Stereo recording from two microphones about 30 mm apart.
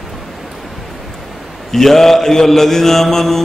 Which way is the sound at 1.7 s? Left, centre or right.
Centre.